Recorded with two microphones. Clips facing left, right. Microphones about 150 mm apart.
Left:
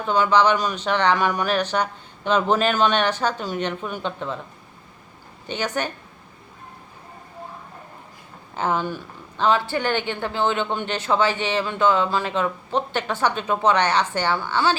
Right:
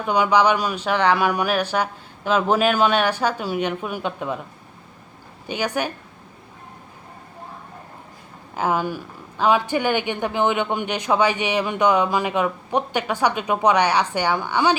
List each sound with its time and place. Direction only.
0.0 s speech: 15° right (ahead or behind)
5.5 s speech: 10° right (ahead or behind)
8.5 s speech: 10° right (ahead or behind)